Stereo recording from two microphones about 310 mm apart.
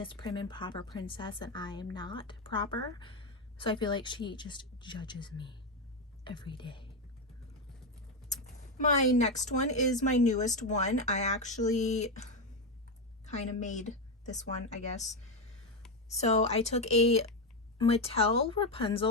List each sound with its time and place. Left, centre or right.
0.0 s speech: centre
8.8 s speech: left
13.2 s speech: left